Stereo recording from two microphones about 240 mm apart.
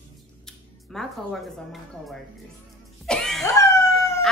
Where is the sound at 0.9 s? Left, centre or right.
Centre.